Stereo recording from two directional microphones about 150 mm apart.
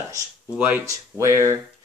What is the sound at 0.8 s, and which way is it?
Speech, 20° right (ahead or behind).